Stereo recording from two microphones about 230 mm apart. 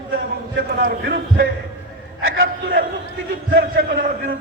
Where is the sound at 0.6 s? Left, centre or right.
Right.